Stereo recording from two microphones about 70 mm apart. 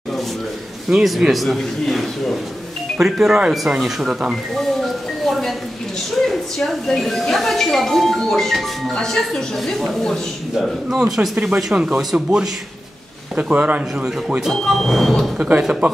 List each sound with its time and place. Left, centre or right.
0.8 s speech: centre
4.7 s music: centre
6.2 s speech: centre
13.4 s speech: right
14.5 s speech: centre
15.3 s speech: centre